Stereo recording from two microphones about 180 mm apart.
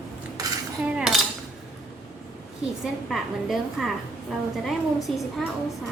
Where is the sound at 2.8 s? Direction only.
Centre (ahead or behind).